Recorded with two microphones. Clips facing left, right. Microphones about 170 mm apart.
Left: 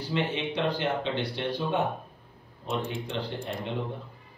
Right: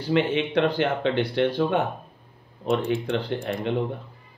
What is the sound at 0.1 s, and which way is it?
Speech, 65° right (ahead or behind).